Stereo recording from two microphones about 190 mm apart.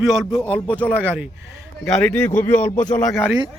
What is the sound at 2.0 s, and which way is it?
A man's voice, 10° left (ahead or behind).